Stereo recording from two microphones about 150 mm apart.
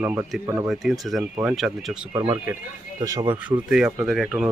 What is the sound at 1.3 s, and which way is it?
Speech, 10° right (ahead or behind).